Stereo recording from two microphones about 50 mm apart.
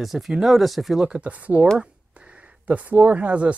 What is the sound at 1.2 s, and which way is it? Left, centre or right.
Speech, right.